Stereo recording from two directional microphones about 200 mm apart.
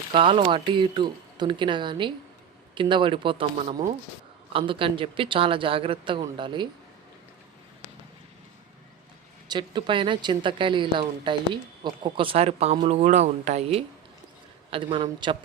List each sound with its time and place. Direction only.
0.1 s a woman's voice: 25° right (ahead or behind)
9.5 s a woman's voice: 25° right (ahead or behind)